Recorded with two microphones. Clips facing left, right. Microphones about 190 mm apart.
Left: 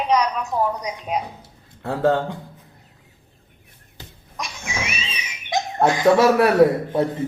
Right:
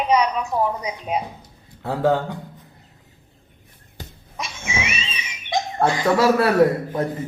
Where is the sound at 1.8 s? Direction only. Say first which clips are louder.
Even; 25° left (ahead or behind).